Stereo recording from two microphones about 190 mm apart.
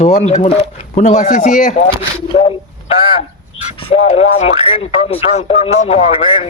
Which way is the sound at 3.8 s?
35° left (ahead or behind).